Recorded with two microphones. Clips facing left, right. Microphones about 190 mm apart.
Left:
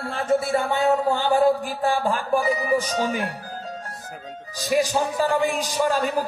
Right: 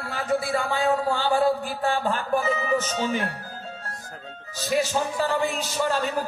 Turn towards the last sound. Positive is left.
turn(degrees=10)  # may be behind; listen again after turning